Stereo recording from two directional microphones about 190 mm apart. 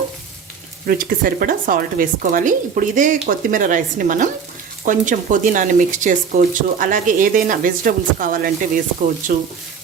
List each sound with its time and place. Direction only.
0.9 s speech: 50° right (ahead or behind)